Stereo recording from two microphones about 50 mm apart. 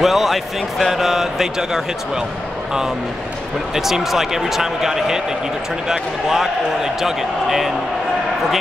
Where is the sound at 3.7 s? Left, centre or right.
Centre.